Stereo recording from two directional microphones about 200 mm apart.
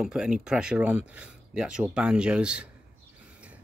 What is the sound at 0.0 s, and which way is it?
Speech, 5° right (ahead or behind).